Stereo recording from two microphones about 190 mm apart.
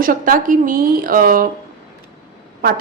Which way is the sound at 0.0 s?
45° right (ahead or behind).